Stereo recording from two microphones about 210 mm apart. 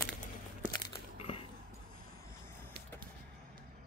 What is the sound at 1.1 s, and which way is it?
Biting, 25° left (ahead or behind).